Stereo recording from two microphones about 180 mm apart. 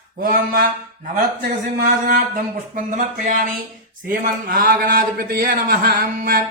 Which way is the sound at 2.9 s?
45° right (ahead or behind).